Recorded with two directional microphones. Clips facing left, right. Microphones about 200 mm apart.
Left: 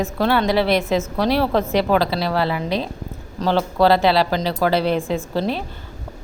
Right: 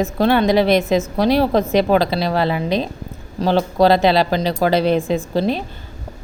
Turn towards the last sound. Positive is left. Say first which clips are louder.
# right 3 dB
turn(degrees=-15)  # may be behind; listen again after turning